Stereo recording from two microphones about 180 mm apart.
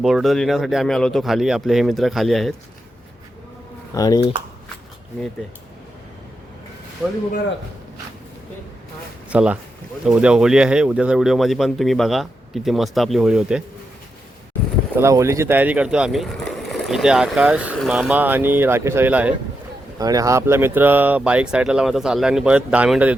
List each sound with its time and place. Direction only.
0.0 s speech: centre (ahead or behind)
3.9 s speech: 20° left (ahead or behind)
9.3 s speech: 5° right (ahead or behind)
14.9 s speech: 15° right (ahead or behind)
20.0 s speech: 20° right (ahead or behind)